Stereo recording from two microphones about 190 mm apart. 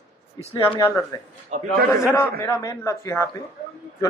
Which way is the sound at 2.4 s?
15° left (ahead or behind).